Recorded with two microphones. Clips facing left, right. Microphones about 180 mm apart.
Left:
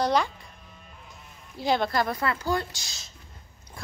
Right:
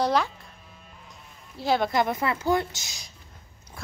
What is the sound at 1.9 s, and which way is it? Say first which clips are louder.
Speech: right 2 dB; 20° right (ahead or behind).